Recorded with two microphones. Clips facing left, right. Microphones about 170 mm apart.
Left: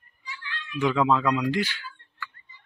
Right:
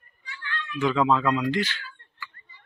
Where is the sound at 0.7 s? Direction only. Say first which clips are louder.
Even; 15° left (ahead or behind).